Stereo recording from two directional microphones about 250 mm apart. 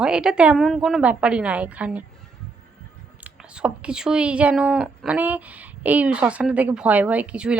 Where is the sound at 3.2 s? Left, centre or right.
Centre.